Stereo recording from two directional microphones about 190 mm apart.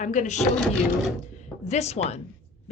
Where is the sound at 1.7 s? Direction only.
35° left (ahead or behind).